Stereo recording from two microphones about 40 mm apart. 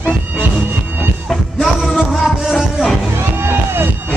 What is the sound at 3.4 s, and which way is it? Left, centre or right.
Music, right.